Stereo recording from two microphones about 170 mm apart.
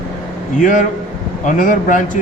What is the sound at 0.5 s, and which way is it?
Speech, 50° left (ahead or behind).